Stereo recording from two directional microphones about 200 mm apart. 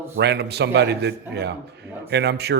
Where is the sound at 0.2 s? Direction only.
55° right (ahead or behind).